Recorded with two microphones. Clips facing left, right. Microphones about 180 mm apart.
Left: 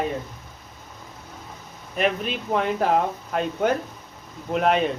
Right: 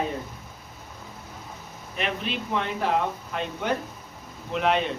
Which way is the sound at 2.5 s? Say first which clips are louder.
Left 5 dB; 45° left (ahead or behind).